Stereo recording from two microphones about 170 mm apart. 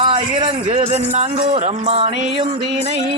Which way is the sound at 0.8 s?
40° right (ahead or behind).